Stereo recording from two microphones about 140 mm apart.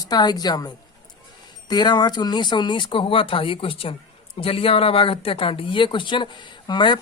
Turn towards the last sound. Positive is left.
turn(degrees=30)  # may be behind; listen again after turning